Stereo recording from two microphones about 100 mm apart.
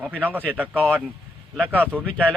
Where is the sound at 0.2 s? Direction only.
20° right (ahead or behind).